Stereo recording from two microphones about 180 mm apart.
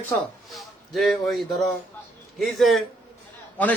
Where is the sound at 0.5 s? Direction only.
Centre (ahead or behind).